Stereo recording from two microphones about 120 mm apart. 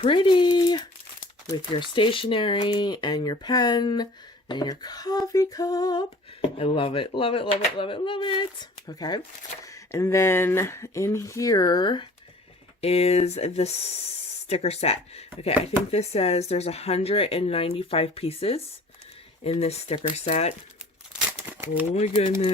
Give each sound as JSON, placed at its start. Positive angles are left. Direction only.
{"t": 0.0, "sound": "speech", "side_deg": 45}
{"t": 6.6, "sound": "speech", "side_deg": 50}
{"t": 9.6, "sound": "speech", "side_deg": 25}
{"t": 12.8, "sound": "speech", "side_deg": 55}